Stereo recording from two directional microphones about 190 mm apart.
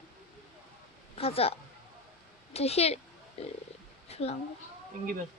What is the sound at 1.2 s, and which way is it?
A woman's voice, 30° left (ahead or behind).